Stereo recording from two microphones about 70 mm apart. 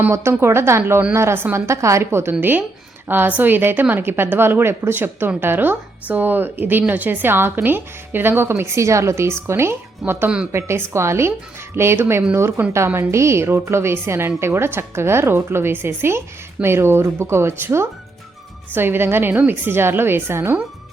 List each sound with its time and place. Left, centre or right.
0.1 s a woman's voice: right
10.2 s a woman's voice: centre
10.5 s a woman's voice: right